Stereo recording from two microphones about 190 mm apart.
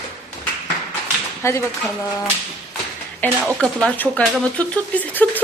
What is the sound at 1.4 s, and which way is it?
Speech, 15° left (ahead or behind).